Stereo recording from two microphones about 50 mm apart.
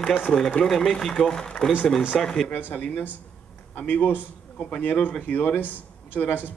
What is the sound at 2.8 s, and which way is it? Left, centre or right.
A man's voice, left.